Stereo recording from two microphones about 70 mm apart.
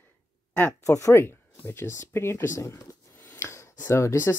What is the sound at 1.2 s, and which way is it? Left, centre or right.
Speech, left.